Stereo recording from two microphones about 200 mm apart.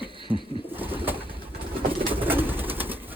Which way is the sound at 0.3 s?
10° right (ahead or behind).